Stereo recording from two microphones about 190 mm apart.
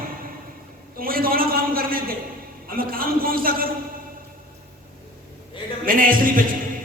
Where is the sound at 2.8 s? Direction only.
50° right (ahead or behind).